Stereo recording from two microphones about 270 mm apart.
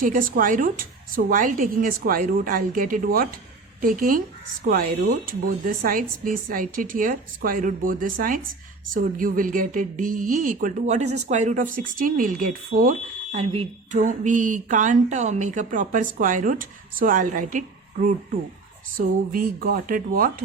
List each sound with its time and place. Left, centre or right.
0.0 s a woman's voice: right
18.9 s a woman's voice: right